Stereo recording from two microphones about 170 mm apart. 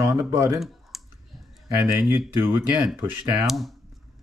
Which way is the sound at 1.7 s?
15° right (ahead or behind).